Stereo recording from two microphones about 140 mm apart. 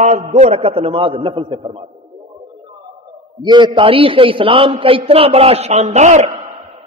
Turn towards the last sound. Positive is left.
turn(degrees=-60)  # may be behind; listen again after turning